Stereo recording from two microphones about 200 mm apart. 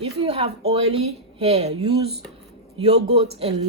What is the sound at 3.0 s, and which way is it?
Speech, 30° right (ahead or behind).